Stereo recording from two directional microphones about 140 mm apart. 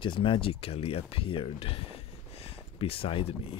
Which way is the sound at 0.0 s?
35° left (ahead or behind).